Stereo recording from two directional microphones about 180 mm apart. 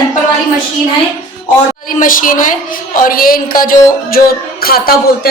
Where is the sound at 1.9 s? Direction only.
50° left (ahead or behind).